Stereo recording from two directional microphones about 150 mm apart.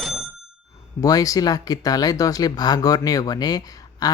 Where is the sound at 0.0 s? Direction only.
Centre (ahead or behind).